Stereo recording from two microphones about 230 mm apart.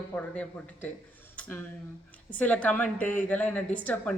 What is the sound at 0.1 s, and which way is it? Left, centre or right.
Speech, centre.